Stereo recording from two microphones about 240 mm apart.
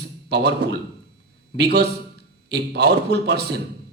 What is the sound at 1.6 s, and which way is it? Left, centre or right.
Speech, right.